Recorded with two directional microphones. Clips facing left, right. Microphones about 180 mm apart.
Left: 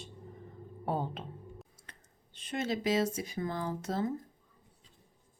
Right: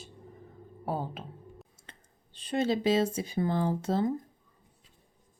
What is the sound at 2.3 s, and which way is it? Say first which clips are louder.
Speech: right 6 dB; 30° right (ahead or behind).